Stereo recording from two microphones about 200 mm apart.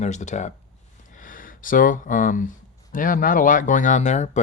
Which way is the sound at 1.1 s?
40° left (ahead or behind).